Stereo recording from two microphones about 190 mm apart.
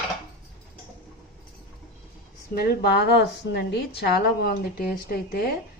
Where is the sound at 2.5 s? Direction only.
60° left (ahead or behind).